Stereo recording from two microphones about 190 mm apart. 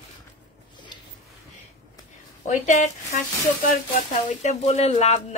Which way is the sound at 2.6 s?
40° left (ahead or behind).